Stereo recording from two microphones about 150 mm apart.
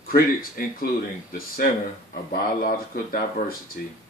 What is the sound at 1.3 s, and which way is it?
Speech, 75° left (ahead or behind).